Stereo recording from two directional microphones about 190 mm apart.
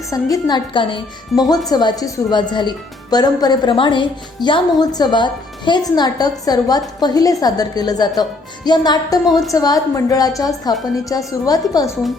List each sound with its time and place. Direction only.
0.1 s a woman's voice: 20° left (ahead or behind)
9.2 s a woman's voice: centre (ahead or behind)
9.5 s a woman's voice: 20° left (ahead or behind)